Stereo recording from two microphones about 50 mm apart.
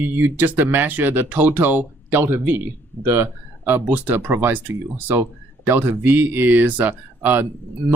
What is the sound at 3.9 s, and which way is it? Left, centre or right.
Speech, right.